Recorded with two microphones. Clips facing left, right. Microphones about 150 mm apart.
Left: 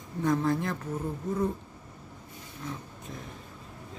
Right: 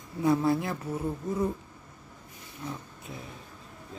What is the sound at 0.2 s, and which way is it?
Speech, 10° right (ahead or behind).